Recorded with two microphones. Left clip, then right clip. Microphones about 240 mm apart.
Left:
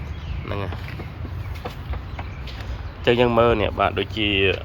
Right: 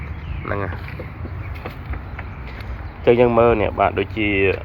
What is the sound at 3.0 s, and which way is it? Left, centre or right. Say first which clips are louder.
Speech: right 3 dB; centre.